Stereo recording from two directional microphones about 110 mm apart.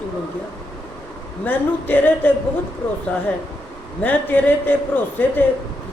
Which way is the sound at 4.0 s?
15° left (ahead or behind).